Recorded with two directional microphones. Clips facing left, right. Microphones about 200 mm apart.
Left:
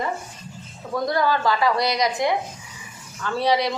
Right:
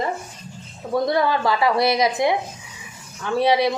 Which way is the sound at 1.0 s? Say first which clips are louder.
Even; 25° right (ahead or behind).